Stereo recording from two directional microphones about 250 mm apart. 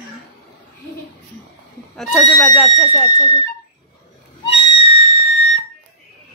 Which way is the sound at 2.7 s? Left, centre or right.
Centre.